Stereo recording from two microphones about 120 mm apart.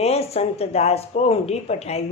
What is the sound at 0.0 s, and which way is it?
A woman's voice, 60° left (ahead or behind).